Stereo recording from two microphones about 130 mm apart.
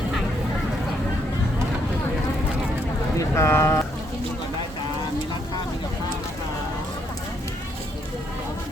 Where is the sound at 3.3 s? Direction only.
20° left (ahead or behind).